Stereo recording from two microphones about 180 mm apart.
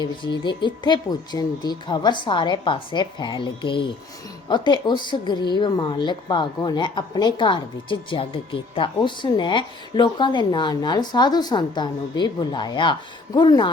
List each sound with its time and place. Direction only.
0.0 s a woman's voice: 25° left (ahead or behind)